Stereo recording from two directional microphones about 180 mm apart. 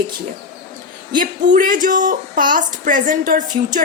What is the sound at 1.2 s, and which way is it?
A woman's voice, 50° right (ahead or behind).